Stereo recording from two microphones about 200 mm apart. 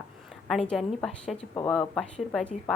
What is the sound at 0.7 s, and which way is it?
A woman's voice, centre (ahead or behind).